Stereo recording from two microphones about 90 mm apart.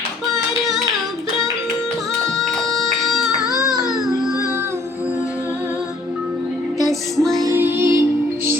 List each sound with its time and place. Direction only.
2.4 s music: centre (ahead or behind)
3.3 s music: 40° left (ahead or behind)
3.8 s baby cry: 5° right (ahead or behind)
6.7 s music: centre (ahead or behind)
7.5 s music: 25° right (ahead or behind)